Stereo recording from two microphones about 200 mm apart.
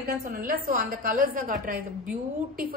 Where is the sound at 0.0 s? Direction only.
45° right (ahead or behind).